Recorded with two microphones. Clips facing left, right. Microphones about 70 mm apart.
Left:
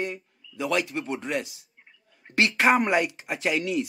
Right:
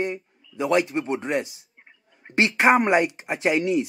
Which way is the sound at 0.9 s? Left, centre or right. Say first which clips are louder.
Right 4 dB; right.